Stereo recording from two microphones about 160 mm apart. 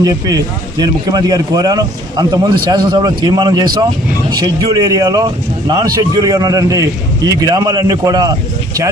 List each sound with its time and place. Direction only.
0.0 s speech: 20° right (ahead or behind)